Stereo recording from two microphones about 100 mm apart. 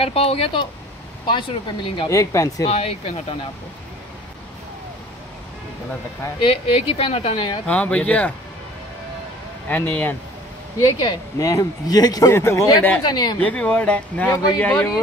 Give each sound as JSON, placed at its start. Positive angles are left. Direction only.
{"t": 0.0, "sound": "a woman's voice", "side_deg": 75}
{"t": 1.2, "sound": "speech", "side_deg": 50}
{"t": 2.0, "sound": "speech", "side_deg": 30}
{"t": 2.7, "sound": "speech", "side_deg": 85}
{"t": 6.4, "sound": "a woman's voice", "side_deg": 65}
{"t": 7.6, "sound": "speech", "side_deg": 15}
{"t": 9.7, "sound": "speech", "side_deg": 15}
{"t": 10.8, "sound": "speech", "side_deg": 35}
{"t": 12.3, "sound": "speech", "side_deg": 25}
{"t": 13.0, "sound": "speech", "side_deg": 45}
{"t": 13.4, "sound": "speech", "side_deg": 15}